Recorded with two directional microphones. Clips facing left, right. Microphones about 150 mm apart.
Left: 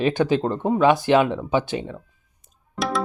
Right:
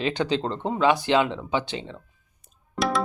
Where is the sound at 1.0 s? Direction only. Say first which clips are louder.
Left 4 dB; 20° right (ahead or behind).